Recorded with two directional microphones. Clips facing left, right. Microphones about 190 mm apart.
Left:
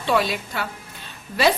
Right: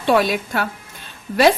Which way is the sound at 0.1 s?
50° right (ahead or behind).